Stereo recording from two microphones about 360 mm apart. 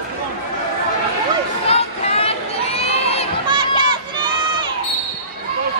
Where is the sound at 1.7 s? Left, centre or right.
Centre.